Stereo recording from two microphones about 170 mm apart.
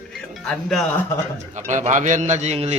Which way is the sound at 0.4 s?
Centre (ahead or behind).